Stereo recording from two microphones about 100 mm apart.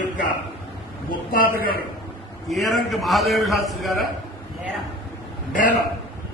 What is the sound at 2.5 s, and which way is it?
A man's voice, centre (ahead or behind).